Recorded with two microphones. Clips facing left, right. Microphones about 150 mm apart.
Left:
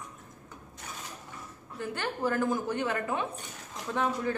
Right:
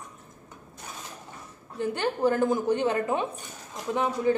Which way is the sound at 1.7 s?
20° right (ahead or behind).